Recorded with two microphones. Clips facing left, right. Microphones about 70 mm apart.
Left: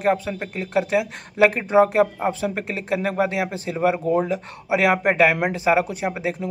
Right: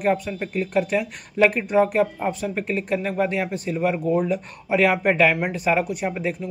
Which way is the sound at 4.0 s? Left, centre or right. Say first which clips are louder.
Left 1 dB; left.